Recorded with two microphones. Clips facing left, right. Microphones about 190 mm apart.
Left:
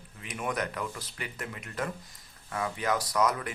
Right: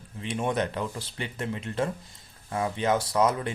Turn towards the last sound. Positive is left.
turn(degrees=-25)  # may be behind; listen again after turning